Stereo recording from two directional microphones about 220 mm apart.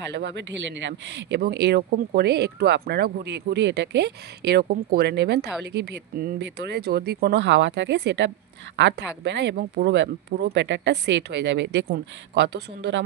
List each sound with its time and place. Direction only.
0.1 s speech: 50° right (ahead or behind)